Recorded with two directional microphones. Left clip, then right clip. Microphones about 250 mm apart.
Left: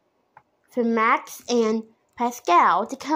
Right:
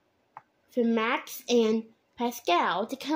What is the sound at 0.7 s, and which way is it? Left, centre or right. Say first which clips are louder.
A woman's voice: left 7 dB; centre.